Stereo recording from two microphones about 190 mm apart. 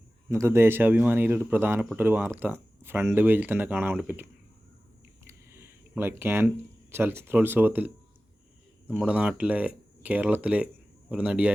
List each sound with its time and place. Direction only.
0.3 s speech: 15° right (ahead or behind)
5.2 s a sound: 15° right (ahead or behind)
6.9 s speech: 10° right (ahead or behind)